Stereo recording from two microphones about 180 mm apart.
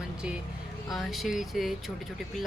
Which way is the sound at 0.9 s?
Centre (ahead or behind).